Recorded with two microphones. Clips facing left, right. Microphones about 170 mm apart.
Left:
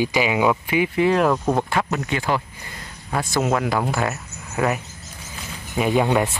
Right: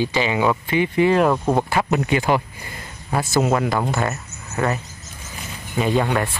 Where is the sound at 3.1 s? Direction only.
5° right (ahead or behind); by 6.3 s 10° left (ahead or behind).